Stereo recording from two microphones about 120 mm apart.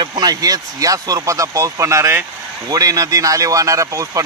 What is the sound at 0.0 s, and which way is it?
Speech, 35° right (ahead or behind).